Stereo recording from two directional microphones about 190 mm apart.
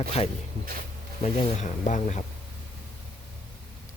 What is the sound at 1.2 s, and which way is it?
Speech, 35° left (ahead or behind).